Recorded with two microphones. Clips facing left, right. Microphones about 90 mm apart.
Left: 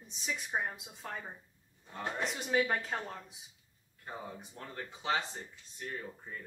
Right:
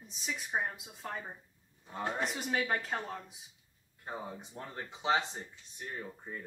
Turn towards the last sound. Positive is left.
turn(degrees=-15)  # may be behind; listen again after turning